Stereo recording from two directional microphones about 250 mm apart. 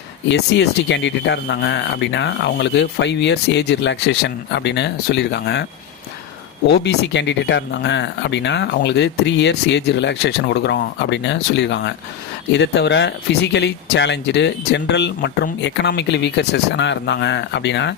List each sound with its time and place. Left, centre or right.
0.3 s speech: left
6.7 s speech: left